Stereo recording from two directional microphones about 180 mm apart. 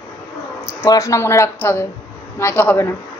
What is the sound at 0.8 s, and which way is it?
A woman's voice, 15° left (ahead or behind).